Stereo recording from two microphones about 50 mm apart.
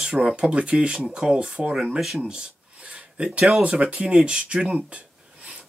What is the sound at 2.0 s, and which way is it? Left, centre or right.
Speech, centre.